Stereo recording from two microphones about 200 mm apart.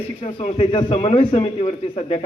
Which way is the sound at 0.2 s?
30° left (ahead or behind).